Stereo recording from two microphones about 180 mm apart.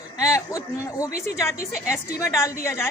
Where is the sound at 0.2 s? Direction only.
15° left (ahead or behind).